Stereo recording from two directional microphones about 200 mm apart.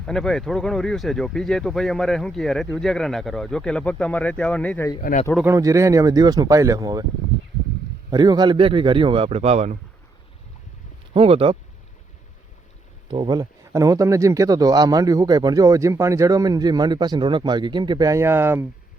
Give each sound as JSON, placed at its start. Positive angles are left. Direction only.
{"t": 0.0, "sound": "speech", "side_deg": 0}
{"t": 4.9, "sound": "speech", "side_deg": 40}
{"t": 5.5, "sound": "speech", "side_deg": -15}
{"t": 8.1, "sound": "speech", "side_deg": -20}
{"t": 11.1, "sound": "speech", "side_deg": -30}
{"t": 13.1, "sound": "speech", "side_deg": -25}